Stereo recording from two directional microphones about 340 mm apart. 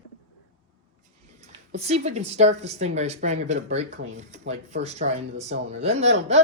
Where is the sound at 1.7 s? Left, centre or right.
Centre.